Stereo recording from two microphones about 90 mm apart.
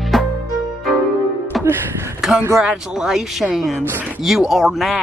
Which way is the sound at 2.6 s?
10° right (ahead or behind).